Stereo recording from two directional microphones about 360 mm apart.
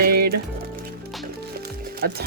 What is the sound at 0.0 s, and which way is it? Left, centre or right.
Music, right.